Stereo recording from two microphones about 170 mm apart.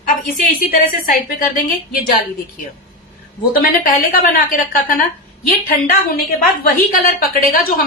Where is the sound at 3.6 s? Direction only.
55° left (ahead or behind).